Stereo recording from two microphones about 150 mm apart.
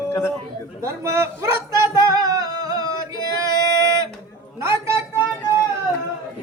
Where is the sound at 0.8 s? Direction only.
20° right (ahead or behind).